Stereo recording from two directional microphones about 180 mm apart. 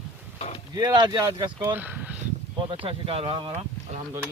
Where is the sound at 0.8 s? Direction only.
25° right (ahead or behind).